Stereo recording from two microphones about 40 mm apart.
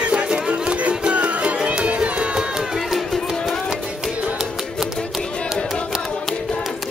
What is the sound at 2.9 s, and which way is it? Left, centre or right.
Music, centre.